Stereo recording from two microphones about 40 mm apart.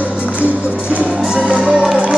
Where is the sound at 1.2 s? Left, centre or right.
Centre.